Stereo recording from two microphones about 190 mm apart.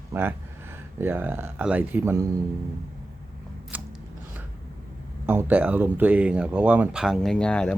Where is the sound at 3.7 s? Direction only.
10° right (ahead or behind).